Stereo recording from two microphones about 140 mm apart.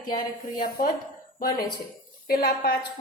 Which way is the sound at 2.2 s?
90° left.